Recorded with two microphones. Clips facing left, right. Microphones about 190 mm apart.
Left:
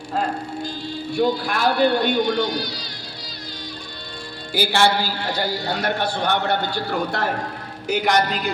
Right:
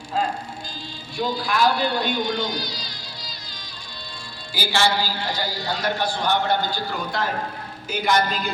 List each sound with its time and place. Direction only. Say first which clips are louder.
1.1 s a man's voice: left 4 dB; 60° left (ahead or behind)
4.5 s a man's voice: left 3 dB; 60° left (ahead or behind)